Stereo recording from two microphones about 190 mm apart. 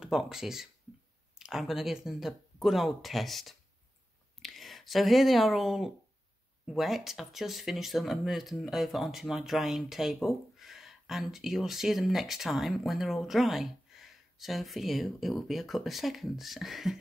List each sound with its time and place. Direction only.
0.0 s speech: 5° right (ahead or behind)